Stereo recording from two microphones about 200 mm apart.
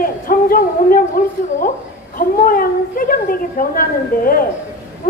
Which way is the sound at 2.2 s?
45° left (ahead or behind).